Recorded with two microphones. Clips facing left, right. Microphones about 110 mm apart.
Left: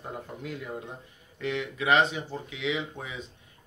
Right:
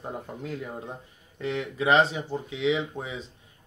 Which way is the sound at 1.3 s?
30° right (ahead or behind).